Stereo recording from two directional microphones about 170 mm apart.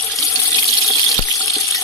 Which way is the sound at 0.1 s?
20° left (ahead or behind).